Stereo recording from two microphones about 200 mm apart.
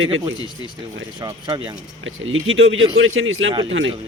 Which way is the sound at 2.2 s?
90° right.